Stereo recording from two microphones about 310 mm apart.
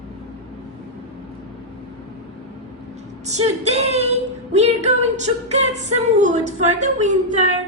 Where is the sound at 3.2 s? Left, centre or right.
Right.